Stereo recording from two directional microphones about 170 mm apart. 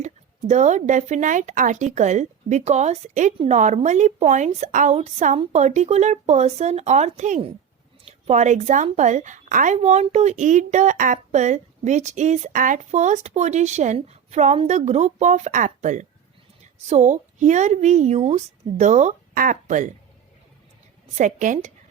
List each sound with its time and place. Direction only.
0.0 s a woman's voice: 45° right (ahead or behind)
21.2 s a woman's voice: 50° right (ahead or behind)